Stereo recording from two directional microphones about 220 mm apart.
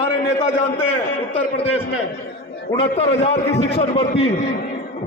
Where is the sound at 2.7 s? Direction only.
25° left (ahead or behind).